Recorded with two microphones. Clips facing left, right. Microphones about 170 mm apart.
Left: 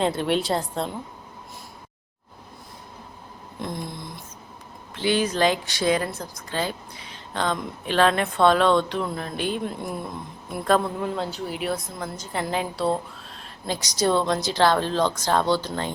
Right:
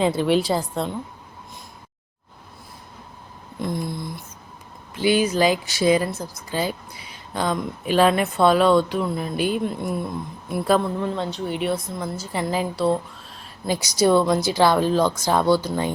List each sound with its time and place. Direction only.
0.0 s a woman's voice: centre (ahead or behind)
3.6 s a woman's voice: centre (ahead or behind)
4.9 s a woman's voice: 10° right (ahead or behind)